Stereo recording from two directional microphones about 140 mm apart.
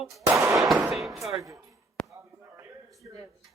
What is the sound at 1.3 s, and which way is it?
Speech, 25° right (ahead or behind).